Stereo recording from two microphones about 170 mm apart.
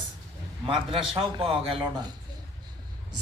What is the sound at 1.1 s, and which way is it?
Speech, 30° right (ahead or behind).